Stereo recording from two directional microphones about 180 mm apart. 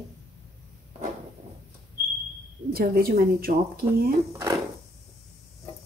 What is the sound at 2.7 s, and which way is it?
Speech, 55° right (ahead or behind).